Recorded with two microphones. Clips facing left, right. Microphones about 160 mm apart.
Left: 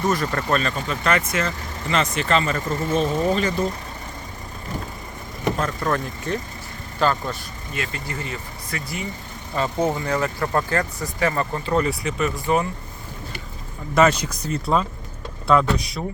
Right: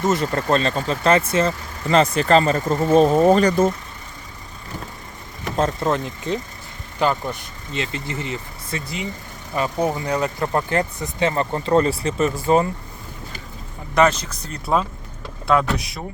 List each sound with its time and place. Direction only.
0.0 s speech: 20° right (ahead or behind); by 3.7 s 45° right (ahead or behind)
5.5 s speech: 25° right (ahead or behind)
13.9 s speech: 5° left (ahead or behind)
15.4 s speech: centre (ahead or behind)